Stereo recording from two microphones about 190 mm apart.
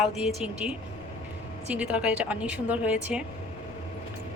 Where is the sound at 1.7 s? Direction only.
5° right (ahead or behind).